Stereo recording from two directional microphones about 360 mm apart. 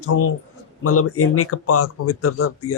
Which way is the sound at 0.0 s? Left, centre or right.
Left.